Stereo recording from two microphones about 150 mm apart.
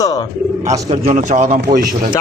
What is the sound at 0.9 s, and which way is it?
Speech, 45° right (ahead or behind).